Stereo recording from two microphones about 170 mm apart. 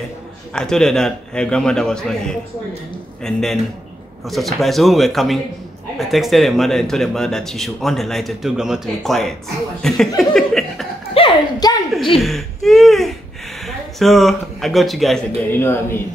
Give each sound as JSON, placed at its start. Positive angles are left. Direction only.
{"t": 0.5, "sound": "speech", "side_deg": 5}
{"t": 11.1, "sound": "a sound", "side_deg": 25}
{"t": 12.2, "sound": "speech", "side_deg": 0}
{"t": 15.5, "sound": "speech", "side_deg": 15}